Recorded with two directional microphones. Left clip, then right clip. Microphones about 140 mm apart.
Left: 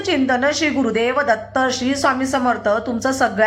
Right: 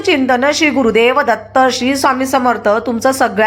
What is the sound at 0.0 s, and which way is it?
A woman's voice, 25° right (ahead or behind).